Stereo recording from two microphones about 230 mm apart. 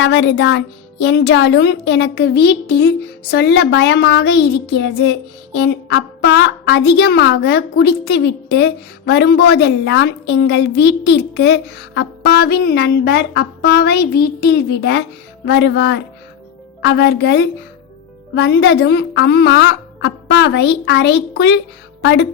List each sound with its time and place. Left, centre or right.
0.0 s a woman's voice: left